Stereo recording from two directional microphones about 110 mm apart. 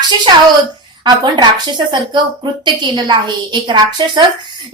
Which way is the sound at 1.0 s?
40° right (ahead or behind).